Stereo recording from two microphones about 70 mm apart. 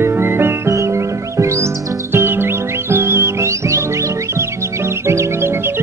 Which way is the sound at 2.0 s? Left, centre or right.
Right.